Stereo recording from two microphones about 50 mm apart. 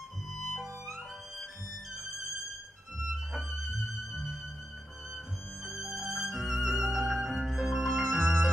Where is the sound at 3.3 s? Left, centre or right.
Centre.